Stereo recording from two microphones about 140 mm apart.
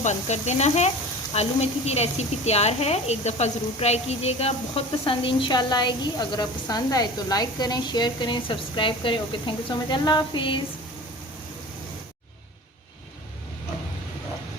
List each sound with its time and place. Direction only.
0.0 s sizzle: 55° left (ahead or behind)
1.3 s a woman's voice: 50° left (ahead or behind)